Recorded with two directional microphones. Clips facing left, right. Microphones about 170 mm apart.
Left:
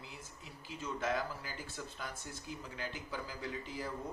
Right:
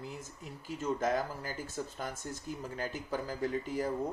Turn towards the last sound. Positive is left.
turn(degrees=-50)  # may be behind; listen again after turning